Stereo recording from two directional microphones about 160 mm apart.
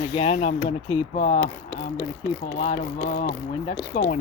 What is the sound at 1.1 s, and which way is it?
Speech, 70° left (ahead or behind).